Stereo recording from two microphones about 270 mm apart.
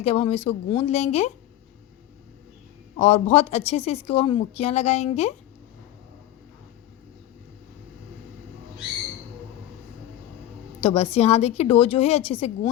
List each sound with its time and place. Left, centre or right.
0.0 s speech: left
3.0 s speech: left
10.8 s speech: left